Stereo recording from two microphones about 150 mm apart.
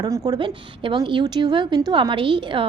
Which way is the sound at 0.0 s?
25° right (ahead or behind).